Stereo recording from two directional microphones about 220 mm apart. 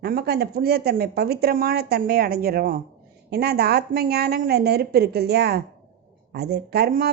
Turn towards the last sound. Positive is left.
turn(degrees=-45)  # may be behind; listen again after turning